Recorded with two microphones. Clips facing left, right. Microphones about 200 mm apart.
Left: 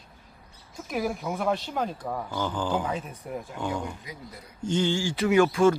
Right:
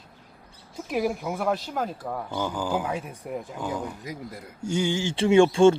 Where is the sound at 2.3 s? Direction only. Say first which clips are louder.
Right 1 dB; 15° right (ahead or behind).